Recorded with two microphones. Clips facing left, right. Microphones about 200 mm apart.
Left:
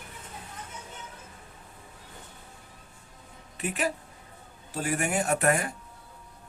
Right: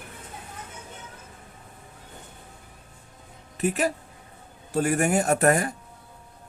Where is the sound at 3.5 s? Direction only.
40° right (ahead or behind).